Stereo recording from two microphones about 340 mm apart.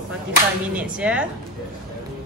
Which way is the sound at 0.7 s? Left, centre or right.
Centre.